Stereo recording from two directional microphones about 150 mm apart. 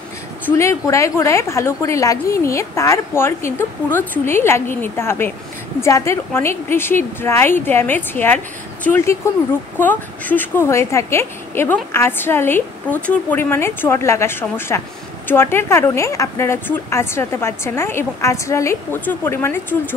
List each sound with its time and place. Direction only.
0.5 s a woman's voice: 20° left (ahead or behind)